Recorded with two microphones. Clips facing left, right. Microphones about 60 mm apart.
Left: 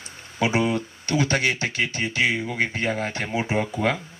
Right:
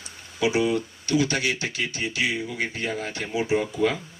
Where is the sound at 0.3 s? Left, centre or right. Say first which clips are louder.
Even; left.